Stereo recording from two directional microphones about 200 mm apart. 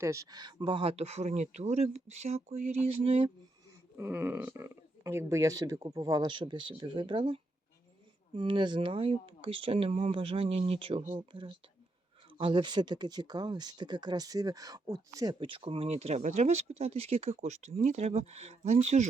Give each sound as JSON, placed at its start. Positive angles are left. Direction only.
{"t": 0.0, "sound": "speech", "side_deg": -15}
{"t": 3.9, "sound": "speech", "side_deg": -10}